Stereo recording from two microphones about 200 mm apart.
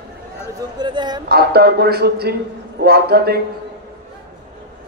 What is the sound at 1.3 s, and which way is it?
A man's voice, 50° right (ahead or behind).